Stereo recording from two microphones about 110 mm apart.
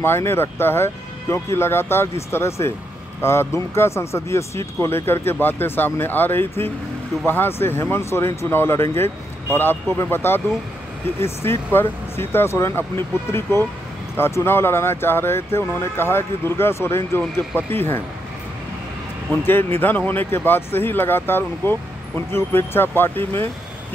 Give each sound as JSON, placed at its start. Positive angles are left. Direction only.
{"t": 0.0, "sound": "speech", "side_deg": 20}
{"t": 19.4, "sound": "speech", "side_deg": 20}